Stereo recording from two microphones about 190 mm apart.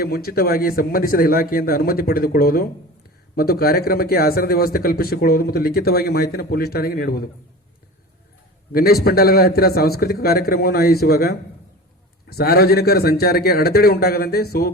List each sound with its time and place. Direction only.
0.0 s speech: 55° left (ahead or behind)
8.7 s a man's voice: 55° left (ahead or behind)